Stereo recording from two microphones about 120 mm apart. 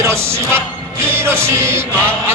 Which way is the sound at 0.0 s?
20° right (ahead or behind).